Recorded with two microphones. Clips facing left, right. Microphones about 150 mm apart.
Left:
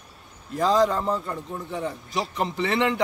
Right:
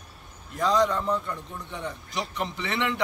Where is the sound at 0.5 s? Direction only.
35° left (ahead or behind).